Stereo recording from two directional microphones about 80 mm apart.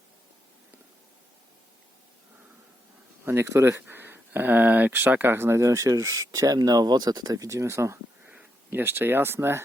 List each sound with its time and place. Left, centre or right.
3.2 s speech: right
8.7 s speech: right